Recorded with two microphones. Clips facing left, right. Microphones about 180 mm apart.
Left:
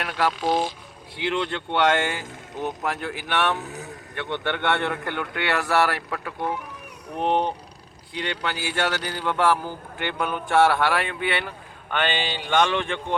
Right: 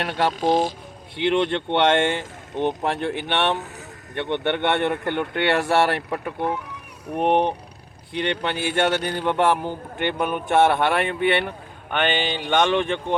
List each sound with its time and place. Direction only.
0.0 s speech: 30° right (ahead or behind)
0.3 s speech: 40° right (ahead or behind)
1.1 s speech: 25° right (ahead or behind)